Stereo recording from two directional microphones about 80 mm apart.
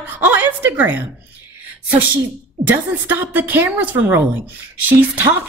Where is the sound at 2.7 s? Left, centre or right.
Right.